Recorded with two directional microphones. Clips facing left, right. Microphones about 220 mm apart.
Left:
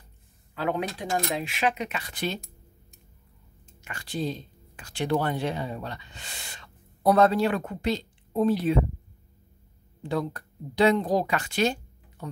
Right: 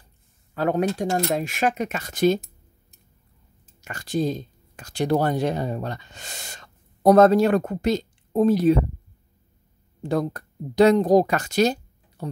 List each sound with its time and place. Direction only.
0.6 s speech: 45° right (ahead or behind)
3.8 s speech: 45° right (ahead or behind)
10.0 s speech: 45° right (ahead or behind)